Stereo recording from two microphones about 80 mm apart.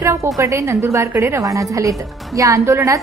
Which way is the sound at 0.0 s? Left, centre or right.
Right.